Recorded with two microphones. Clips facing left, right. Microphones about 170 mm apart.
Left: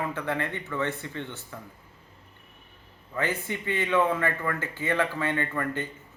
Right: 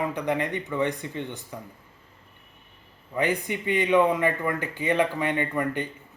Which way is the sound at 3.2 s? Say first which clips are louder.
Right 4 dB; 15° right (ahead or behind).